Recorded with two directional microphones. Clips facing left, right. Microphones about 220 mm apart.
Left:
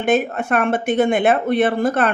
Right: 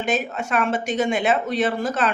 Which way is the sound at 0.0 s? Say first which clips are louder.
Left 6 dB; 55° left (ahead or behind).